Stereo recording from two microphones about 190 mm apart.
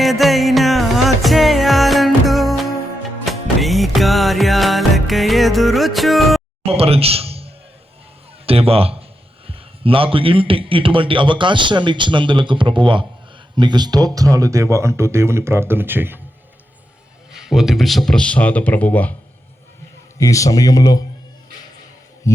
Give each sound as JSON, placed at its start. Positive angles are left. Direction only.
{"t": 0.0, "sound": "music", "side_deg": 0}
{"t": 6.7, "sound": "a man's voice", "side_deg": -30}
{"t": 17.3, "sound": "speech", "side_deg": 0}
{"t": 20.1, "sound": "speech", "side_deg": 15}